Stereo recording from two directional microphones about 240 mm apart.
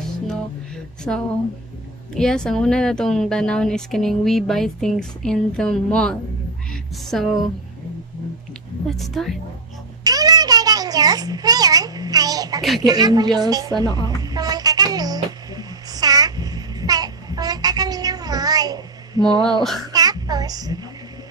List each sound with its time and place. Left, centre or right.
1.1 s a woman's voice: centre
8.8 s a woman's voice: centre
10.0 s a sound: centre